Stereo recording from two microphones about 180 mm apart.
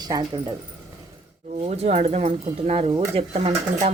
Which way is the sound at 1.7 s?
35° right (ahead or behind).